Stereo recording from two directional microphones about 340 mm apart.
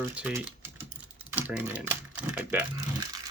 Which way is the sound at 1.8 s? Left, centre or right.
Centre.